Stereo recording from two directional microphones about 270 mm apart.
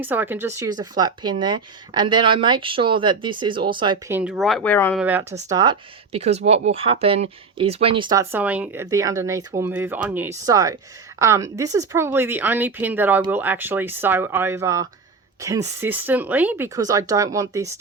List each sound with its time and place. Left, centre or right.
0.0 s speech: centre
4.2 s speech: centre
5.5 s speech: centre